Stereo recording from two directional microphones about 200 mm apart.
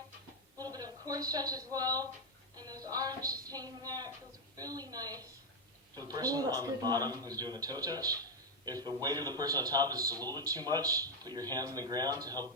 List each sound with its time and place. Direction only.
0.6 s a woman's voice: 20° right (ahead or behind)